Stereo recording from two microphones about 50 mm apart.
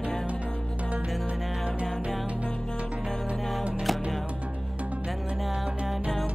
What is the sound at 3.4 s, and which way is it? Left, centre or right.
Music, centre.